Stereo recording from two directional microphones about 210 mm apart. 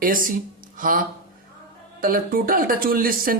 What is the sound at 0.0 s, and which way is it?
Speech, 40° right (ahead or behind).